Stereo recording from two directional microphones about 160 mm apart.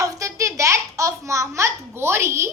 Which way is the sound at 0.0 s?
20° right (ahead or behind).